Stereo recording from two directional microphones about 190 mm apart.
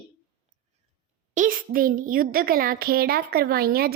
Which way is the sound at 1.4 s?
45° right (ahead or behind).